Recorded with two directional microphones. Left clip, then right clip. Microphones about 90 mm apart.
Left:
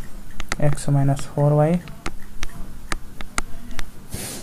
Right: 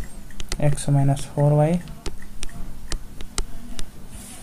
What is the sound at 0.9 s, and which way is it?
Speech, 20° left (ahead or behind).